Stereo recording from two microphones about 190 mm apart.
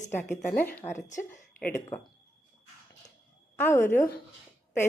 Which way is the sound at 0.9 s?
40° left (ahead or behind).